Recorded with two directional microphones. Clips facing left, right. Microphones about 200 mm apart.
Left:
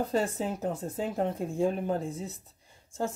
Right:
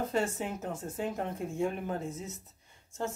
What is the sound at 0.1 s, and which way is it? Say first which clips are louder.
Speech: left 3 dB; 35° left (ahead or behind).